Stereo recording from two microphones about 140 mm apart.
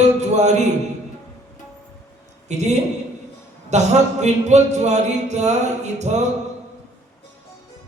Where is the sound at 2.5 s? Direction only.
55° right (ahead or behind).